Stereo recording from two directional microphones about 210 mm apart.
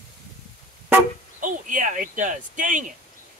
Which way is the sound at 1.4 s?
40° right (ahead or behind).